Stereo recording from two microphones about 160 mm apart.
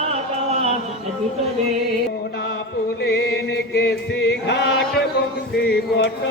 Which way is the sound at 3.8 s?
90° left.